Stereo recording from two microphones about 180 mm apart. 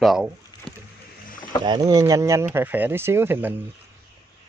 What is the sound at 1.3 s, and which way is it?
Rowboat, 50° left (ahead or behind).